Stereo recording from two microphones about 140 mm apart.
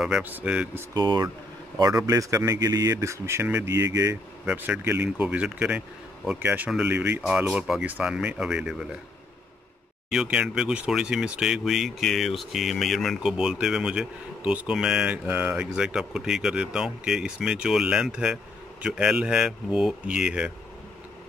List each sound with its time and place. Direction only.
0.0 s a man's voice: 10° right (ahead or behind)
0.9 s a man's voice: 30° right (ahead or behind)
4.5 s a man's voice: 15° right (ahead or behind)
10.0 s speech: 5° right (ahead or behind)